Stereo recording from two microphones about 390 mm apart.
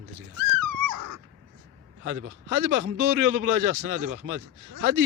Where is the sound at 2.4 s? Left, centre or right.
Right.